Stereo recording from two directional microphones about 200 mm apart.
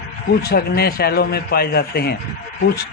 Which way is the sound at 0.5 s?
50° left (ahead or behind).